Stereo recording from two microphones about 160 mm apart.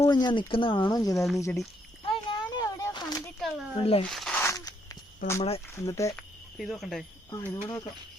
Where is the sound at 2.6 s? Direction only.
20° left (ahead or behind).